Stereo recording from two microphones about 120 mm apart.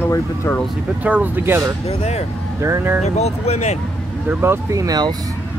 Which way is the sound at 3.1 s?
60° left (ahead or behind).